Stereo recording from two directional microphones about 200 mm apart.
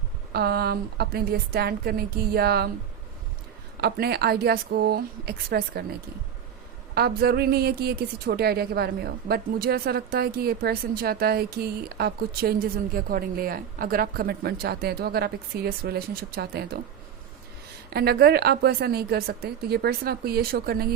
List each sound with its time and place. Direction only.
0.3 s speech: 50° right (ahead or behind)
3.8 s speech: 50° right (ahead or behind)
6.9 s speech: 50° right (ahead or behind)
17.9 s speech: 50° right (ahead or behind)